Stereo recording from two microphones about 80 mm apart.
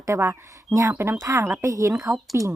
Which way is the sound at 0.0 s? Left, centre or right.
Right.